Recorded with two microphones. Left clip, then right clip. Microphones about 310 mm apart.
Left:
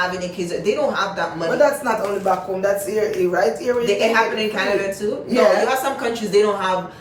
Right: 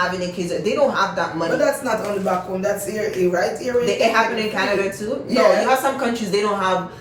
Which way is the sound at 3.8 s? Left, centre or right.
Centre.